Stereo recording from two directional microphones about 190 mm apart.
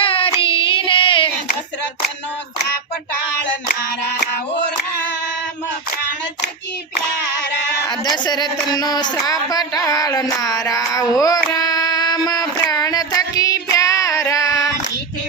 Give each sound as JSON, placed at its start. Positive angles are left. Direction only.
{"t": 0.0, "sound": "child singing", "side_deg": 30}
{"t": 7.9, "sound": "speech", "side_deg": 20}